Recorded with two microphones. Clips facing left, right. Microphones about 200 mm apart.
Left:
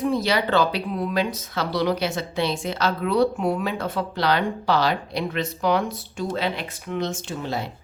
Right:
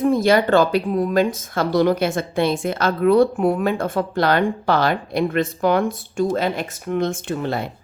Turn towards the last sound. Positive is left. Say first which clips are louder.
# right 5 dB
turn(degrees=-55)  # may be behind; listen again after turning